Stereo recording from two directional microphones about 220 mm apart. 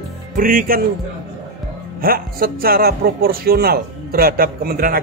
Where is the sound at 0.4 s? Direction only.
40° right (ahead or behind).